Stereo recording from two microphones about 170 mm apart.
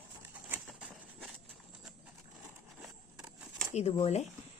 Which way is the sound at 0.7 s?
5° right (ahead or behind).